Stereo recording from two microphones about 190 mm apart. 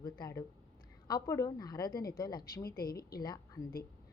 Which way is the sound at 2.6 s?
50° left (ahead or behind).